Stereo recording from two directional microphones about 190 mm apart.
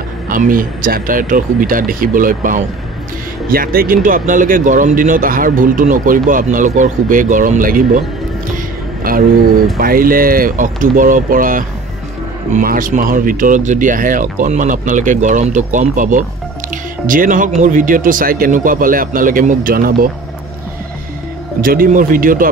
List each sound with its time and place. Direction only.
0.3 s speech: 45° right (ahead or behind)
9.1 s speech: 50° right (ahead or behind)
21.5 s speech: 50° right (ahead or behind)